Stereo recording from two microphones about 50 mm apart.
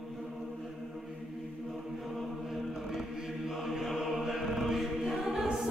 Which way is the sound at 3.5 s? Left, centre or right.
Centre.